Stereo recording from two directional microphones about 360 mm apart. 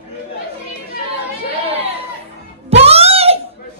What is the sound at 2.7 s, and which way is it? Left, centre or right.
Music, centre.